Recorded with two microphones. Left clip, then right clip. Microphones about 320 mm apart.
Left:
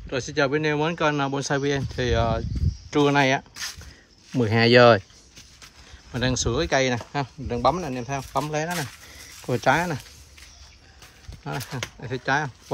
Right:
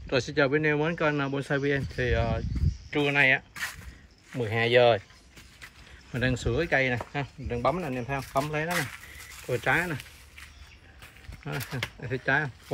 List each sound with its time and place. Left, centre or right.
0.1 s speech: centre
3.1 s speech: left
6.1 s speech: centre
9.5 s speech: left
11.4 s speech: centre